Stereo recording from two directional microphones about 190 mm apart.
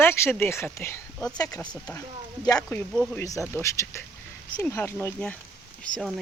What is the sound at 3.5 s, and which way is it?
Speech, 15° left (ahead or behind).